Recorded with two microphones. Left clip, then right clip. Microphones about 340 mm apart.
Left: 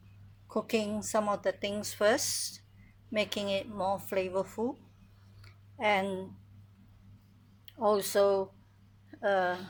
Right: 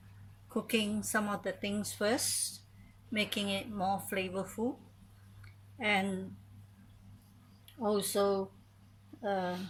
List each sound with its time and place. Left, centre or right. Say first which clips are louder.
0.5 s speech: left 2 dB; centre
5.8 s speech: left 3 dB; centre
7.9 s speech: left 5 dB; centre